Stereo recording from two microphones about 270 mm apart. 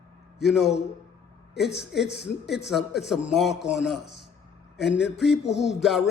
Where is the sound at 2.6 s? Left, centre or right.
Centre.